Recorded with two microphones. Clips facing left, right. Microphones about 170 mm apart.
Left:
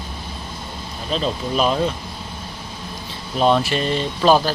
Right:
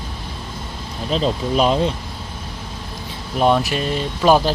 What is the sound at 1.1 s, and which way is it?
Speech, 25° right (ahead or behind).